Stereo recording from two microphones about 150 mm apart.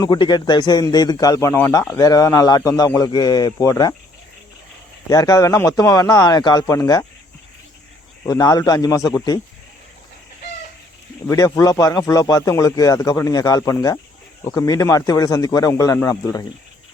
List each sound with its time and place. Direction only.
0.0 s speech: 30° left (ahead or behind)
5.0 s speech: 25° left (ahead or behind)
8.3 s speech: 25° left (ahead or behind)
11.3 s speech: 25° left (ahead or behind)